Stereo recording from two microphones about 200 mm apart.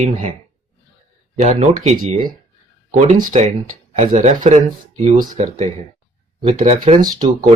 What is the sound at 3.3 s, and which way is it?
Speech, 30° right (ahead or behind).